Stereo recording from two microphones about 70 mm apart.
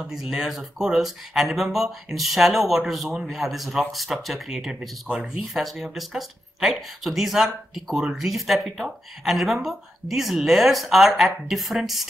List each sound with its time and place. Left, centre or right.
0.0 s speech: centre
4.7 s speech: centre
5.4 s speech: centre